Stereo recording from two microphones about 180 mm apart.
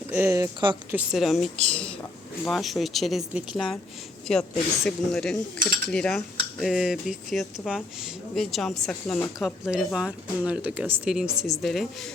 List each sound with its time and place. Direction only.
0.1 s speech: 15° right (ahead or behind)
0.9 s speech: 5° right (ahead or behind)